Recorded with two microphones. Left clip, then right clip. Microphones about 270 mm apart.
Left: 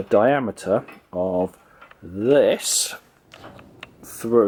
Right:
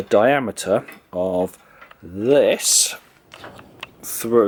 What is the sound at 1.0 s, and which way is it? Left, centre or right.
Speech, left.